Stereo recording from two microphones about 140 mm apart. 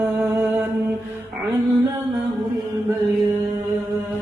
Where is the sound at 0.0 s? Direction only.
15° right (ahead or behind).